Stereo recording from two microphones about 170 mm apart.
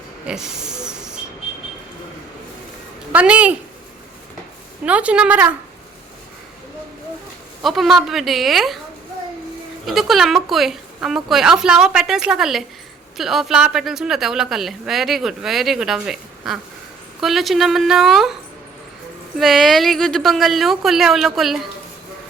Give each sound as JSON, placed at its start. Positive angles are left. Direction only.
{"t": 0.3, "sound": "a sound", "side_deg": -5}
{"t": 3.1, "sound": "a woman's voice", "side_deg": -10}
{"t": 4.9, "sound": "a woman's voice", "side_deg": -5}
{"t": 7.6, "sound": "a woman's voice", "side_deg": 0}
{"t": 9.8, "sound": "a woman's voice", "side_deg": 0}
{"t": 19.4, "sound": "a woman's voice", "side_deg": 0}